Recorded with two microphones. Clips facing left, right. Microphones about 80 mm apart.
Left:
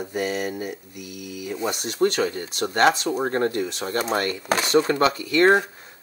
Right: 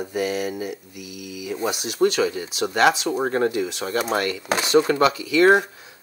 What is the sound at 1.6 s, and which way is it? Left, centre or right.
Speech, centre.